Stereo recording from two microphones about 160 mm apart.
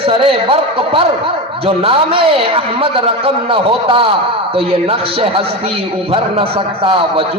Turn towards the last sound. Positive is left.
turn(degrees=-35)  # may be behind; listen again after turning